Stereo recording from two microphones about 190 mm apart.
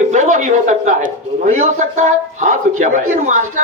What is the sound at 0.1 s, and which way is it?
A man's voice, 40° right (ahead or behind).